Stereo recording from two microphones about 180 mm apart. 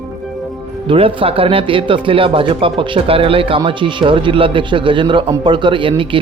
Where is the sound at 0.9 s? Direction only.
30° right (ahead or behind).